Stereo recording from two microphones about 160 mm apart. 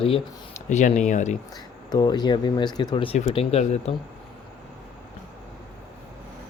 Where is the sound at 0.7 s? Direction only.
45° left (ahead or behind).